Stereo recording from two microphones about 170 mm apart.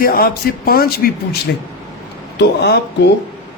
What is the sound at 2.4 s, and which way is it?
Speech, 80° left.